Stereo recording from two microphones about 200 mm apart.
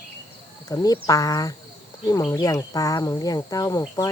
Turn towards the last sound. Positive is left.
turn(degrees=15)  # may be behind; listen again after turning